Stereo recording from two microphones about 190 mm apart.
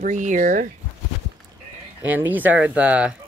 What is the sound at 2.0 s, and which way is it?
Speech, 10° right (ahead or behind).